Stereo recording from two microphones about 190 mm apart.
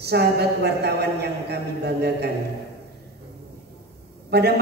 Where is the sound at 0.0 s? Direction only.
60° right (ahead or behind).